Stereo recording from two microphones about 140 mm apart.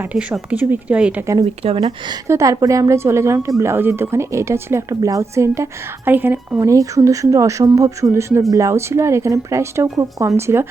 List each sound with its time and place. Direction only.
0.0 s speech: 10° right (ahead or behind)
1.8 s a woman's voice: 25° right (ahead or behind)